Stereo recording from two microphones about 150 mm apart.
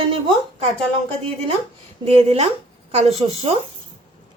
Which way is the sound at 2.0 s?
40° right (ahead or behind).